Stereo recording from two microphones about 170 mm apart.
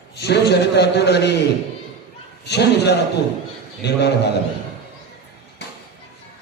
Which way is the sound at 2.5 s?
80° left.